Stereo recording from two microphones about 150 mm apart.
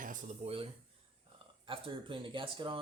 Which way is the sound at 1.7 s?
35° right (ahead or behind).